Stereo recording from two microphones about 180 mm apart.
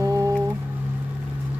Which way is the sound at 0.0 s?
15° right (ahead or behind).